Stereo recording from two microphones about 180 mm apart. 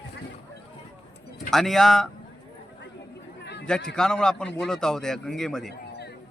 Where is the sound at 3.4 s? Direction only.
70° left (ahead or behind).